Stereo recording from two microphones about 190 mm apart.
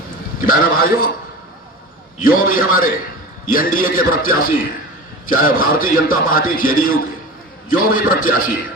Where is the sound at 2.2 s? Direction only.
50° left (ahead or behind).